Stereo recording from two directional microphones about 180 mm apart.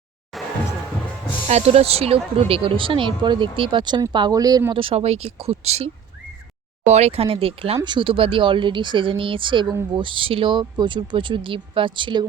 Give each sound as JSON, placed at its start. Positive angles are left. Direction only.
{"t": 0.3, "sound": "music", "side_deg": 0}
{"t": 1.5, "sound": "speech", "side_deg": -35}